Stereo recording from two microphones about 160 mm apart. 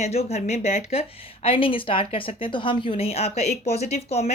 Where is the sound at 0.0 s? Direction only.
40° left (ahead or behind).